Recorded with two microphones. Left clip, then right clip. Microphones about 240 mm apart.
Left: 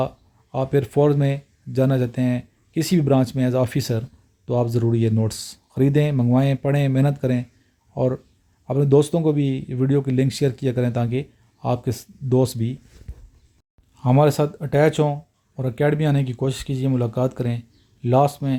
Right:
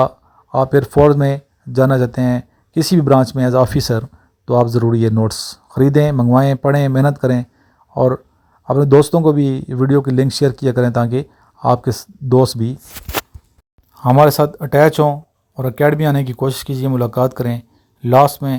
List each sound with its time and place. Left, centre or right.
0.5 s speech: right
13.9 s speech: centre